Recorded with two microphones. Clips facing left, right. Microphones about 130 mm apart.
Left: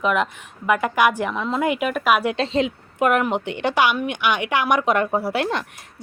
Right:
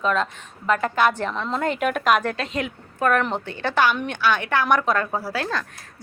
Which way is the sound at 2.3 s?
25° left (ahead or behind).